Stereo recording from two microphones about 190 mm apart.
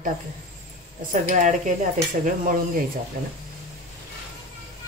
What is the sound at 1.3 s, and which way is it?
Dishes, 40° right (ahead or behind).